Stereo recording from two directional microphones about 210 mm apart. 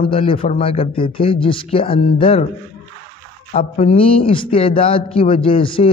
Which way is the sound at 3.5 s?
25° left (ahead or behind).